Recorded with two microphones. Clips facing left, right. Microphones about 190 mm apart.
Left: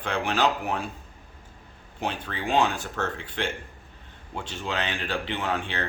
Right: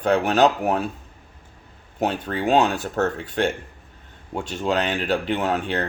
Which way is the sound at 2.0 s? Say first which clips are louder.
Right 8 dB; 45° right (ahead or behind).